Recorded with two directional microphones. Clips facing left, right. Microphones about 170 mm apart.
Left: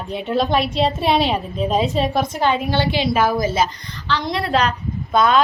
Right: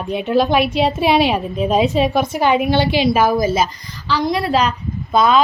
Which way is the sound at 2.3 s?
10° right (ahead or behind).